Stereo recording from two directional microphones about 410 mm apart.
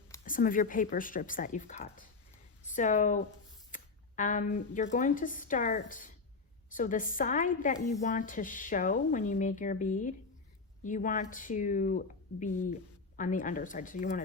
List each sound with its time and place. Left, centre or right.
0.3 s a woman's voice: centre